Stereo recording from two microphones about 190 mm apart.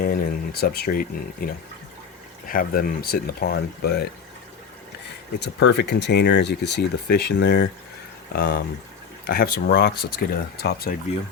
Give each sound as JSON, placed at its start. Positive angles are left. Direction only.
{"t": 0.0, "sound": "a sound", "side_deg": 50}
{"t": 1.4, "sound": "speech", "side_deg": 50}
{"t": 5.4, "sound": "speech", "side_deg": 65}